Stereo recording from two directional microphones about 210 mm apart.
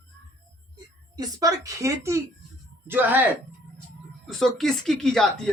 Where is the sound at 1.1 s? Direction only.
15° right (ahead or behind).